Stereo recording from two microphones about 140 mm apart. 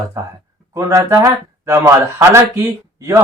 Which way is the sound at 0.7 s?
20° right (ahead or behind).